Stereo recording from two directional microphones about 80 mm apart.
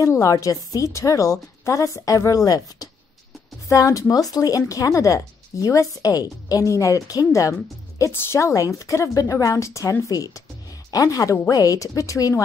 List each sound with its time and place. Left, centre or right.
0.0 s a woman's voice: left